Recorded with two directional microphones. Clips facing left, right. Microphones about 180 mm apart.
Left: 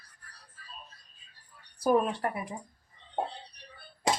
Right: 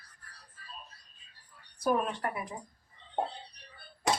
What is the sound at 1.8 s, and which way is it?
Speech, 35° left (ahead or behind).